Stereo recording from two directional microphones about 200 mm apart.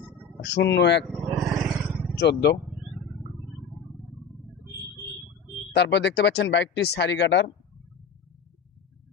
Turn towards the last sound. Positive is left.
turn(degrees=60)  # may be behind; listen again after turning